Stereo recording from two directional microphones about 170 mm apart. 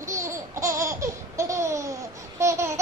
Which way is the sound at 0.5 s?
15° right (ahead or behind).